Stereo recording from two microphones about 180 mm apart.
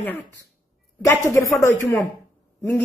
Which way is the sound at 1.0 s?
15° left (ahead or behind).